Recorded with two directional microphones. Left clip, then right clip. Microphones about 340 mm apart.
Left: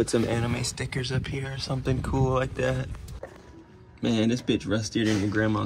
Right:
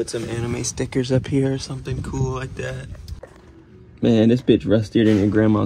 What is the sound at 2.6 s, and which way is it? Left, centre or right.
Speech, centre.